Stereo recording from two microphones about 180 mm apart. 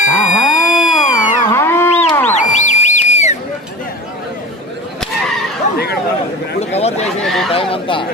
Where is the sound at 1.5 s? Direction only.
15° left (ahead or behind).